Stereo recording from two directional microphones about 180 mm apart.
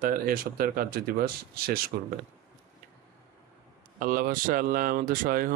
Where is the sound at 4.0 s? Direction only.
50° right (ahead or behind).